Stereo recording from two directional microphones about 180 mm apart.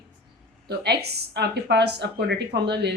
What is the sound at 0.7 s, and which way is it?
Speech, 65° right (ahead or behind).